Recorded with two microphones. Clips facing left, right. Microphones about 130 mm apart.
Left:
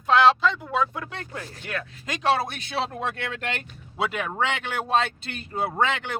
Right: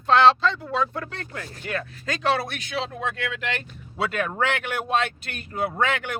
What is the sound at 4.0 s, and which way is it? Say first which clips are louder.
Speech: right 1 dB; 15° left (ahead or behind).